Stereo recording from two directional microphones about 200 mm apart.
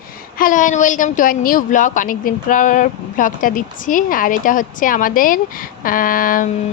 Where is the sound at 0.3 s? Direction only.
40° left (ahead or behind).